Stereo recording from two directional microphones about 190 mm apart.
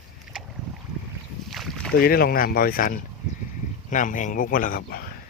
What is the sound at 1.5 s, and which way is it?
Boat, centre (ahead or behind).